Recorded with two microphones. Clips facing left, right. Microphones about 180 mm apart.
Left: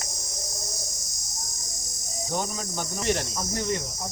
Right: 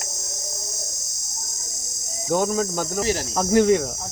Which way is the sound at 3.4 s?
80° right.